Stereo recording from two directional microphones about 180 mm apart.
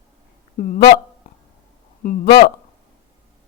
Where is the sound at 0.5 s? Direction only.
50° left (ahead or behind).